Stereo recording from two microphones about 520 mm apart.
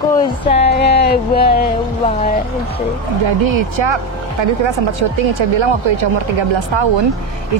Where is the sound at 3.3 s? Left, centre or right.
Right.